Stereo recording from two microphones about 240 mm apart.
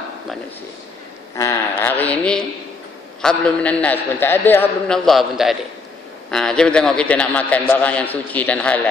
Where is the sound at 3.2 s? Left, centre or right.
Centre.